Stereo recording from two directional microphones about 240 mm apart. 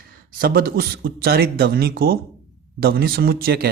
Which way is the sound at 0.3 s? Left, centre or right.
Right.